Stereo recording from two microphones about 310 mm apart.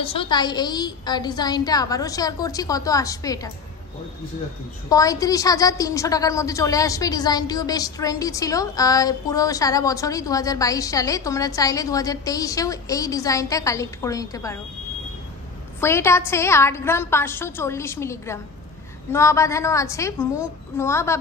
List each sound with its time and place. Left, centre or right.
0.0 s a woman's voice: centre
4.8 s a woman's voice: centre
15.8 s a woman's voice: centre